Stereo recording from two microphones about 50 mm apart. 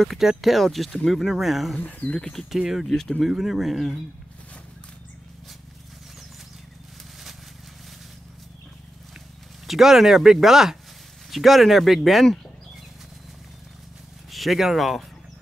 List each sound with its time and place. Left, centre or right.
0.0 s speech: centre
1.8 s speech: left
2.1 s speech: centre
2.7 s speech: centre
3.3 s speech: centre
9.7 s speech: centre
14.3 s speech: centre